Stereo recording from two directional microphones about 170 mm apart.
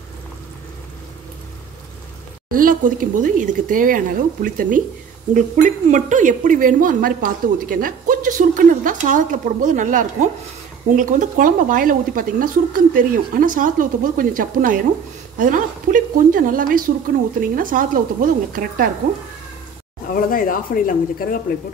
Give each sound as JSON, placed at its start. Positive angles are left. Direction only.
{"t": 2.5, "sound": "a woman's voice", "side_deg": -55}
{"t": 20.1, "sound": "speech", "side_deg": 60}